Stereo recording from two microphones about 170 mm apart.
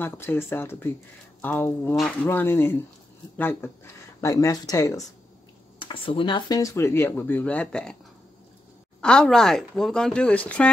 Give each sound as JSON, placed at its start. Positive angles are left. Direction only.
{"t": 0.0, "sound": "speech", "side_deg": 15}
{"t": 5.8, "sound": "speech", "side_deg": 30}
{"t": 9.0, "sound": "speech", "side_deg": 5}